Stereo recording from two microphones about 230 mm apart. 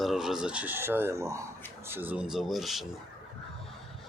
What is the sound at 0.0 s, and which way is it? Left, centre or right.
Speech, centre.